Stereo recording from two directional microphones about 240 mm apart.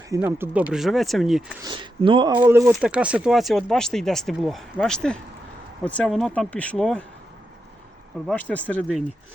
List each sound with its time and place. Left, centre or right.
0.1 s speech: centre
1.6 s speech: centre
2.4 s speech: centre
8.3 s speech: centre